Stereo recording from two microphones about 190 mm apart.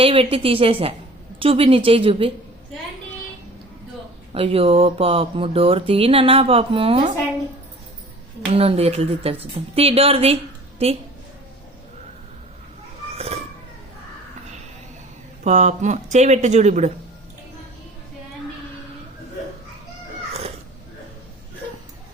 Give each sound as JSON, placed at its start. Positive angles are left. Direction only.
{"t": 0.0, "sound": "speech", "side_deg": -30}
{"t": 4.3, "sound": "speech", "side_deg": -30}
{"t": 8.5, "sound": "speech", "side_deg": -30}
{"t": 13.1, "sound": "a sound", "side_deg": -35}
{"t": 15.4, "sound": "speech", "side_deg": -35}